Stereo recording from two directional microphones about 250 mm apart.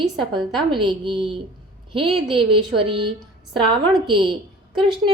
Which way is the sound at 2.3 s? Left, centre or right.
Right.